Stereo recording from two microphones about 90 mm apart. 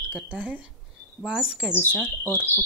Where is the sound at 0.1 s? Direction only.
15° right (ahead or behind).